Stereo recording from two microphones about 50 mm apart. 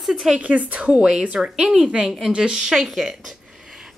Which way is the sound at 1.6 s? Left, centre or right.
Centre.